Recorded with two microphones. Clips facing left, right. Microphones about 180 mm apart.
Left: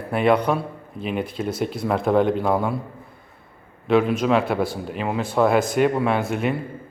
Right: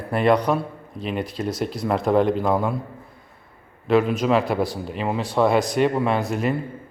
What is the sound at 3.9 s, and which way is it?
A man's voice, centre (ahead or behind).